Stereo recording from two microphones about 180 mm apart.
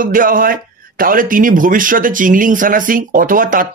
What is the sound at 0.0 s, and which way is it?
A man's voice, 50° right (ahead or behind).